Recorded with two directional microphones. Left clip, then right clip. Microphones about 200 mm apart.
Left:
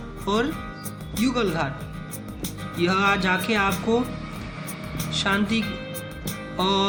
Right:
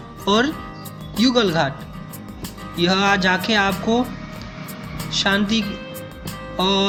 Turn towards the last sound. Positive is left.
turn(degrees=-10)  # may be behind; listen again after turning